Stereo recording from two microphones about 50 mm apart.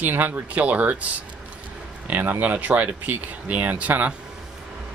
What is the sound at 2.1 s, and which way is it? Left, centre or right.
Speech, right.